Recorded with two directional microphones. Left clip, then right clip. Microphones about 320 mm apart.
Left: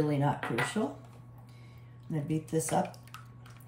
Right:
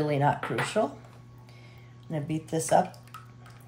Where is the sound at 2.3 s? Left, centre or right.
Centre.